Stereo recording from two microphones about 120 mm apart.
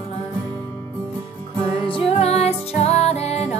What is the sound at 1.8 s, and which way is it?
Music, 55° left (ahead or behind).